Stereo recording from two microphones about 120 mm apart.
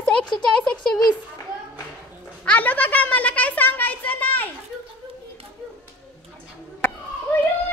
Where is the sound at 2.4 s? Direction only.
15° left (ahead or behind).